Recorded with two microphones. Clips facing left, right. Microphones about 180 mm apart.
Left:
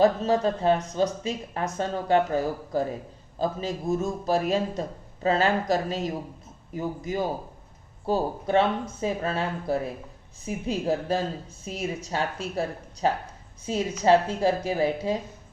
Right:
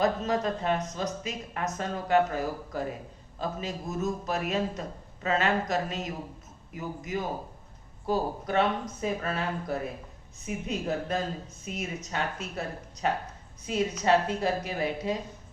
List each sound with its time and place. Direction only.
0.0 s a man's voice: 30° left (ahead or behind)